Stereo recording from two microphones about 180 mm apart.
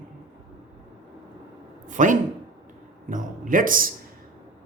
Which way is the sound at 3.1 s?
50° right (ahead or behind).